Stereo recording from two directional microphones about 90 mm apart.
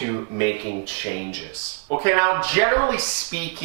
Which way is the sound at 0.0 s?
15° right (ahead or behind).